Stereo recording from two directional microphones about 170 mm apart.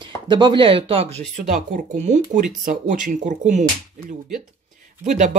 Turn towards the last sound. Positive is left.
turn(degrees=-45)  # may be behind; listen again after turning